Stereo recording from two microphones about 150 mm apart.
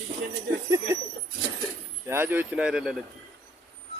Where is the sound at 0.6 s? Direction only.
20° right (ahead or behind).